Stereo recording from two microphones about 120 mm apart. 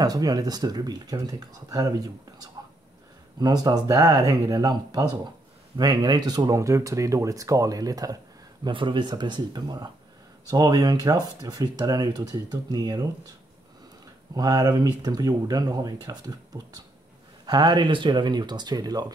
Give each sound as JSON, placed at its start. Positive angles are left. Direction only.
{"t": 0.0, "sound": "speech", "side_deg": -30}
{"t": 8.6, "sound": "speech", "side_deg": -40}
{"t": 14.3, "sound": "speech", "side_deg": -30}